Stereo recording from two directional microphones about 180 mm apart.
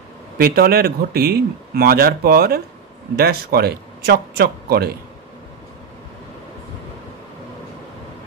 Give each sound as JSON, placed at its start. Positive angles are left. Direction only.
{"t": 0.4, "sound": "a man's voice", "side_deg": -55}